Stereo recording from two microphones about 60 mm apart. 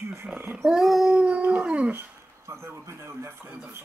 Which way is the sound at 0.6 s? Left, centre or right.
Centre.